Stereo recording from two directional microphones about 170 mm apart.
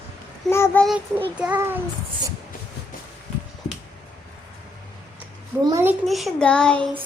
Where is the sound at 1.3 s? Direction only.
10° right (ahead or behind).